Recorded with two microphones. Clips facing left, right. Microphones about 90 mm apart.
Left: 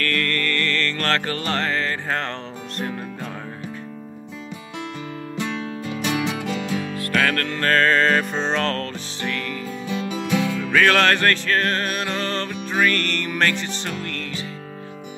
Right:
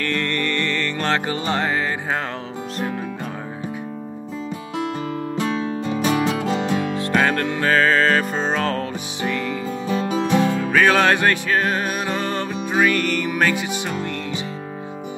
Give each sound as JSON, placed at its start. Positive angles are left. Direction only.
{"t": 0.0, "sound": "music", "side_deg": -20}
{"t": 5.3, "sound": "music", "side_deg": -35}
{"t": 9.8, "sound": "music", "side_deg": -40}
{"t": 10.7, "sound": "music", "side_deg": -10}